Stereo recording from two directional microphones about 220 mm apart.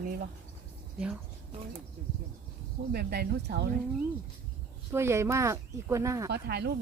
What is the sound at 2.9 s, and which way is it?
Speech, 45° right (ahead or behind).